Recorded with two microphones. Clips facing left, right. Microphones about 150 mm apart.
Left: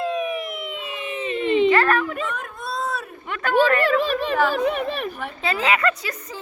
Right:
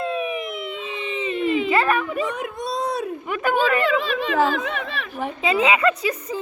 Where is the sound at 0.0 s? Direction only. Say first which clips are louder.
Left 1 dB; 5° right (ahead or behind).